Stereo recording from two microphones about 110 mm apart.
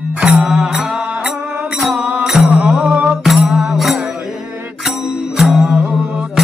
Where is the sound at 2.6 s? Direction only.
10° right (ahead or behind).